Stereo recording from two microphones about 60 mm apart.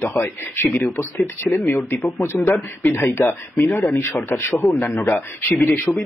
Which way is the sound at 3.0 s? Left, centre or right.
Left.